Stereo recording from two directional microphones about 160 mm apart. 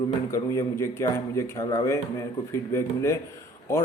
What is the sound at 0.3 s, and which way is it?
A man's voice, 15° left (ahead or behind).